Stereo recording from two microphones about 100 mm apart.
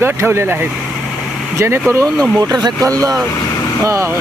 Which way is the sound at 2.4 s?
45° right (ahead or behind).